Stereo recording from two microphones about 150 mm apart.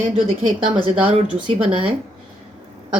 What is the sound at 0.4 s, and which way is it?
Speech, 35° right (ahead or behind).